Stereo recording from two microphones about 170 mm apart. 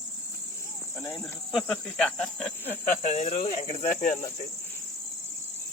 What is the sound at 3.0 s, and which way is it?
Speech, 40° left (ahead or behind).